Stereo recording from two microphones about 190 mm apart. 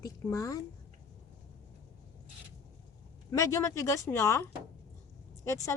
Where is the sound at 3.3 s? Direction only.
15° left (ahead or behind).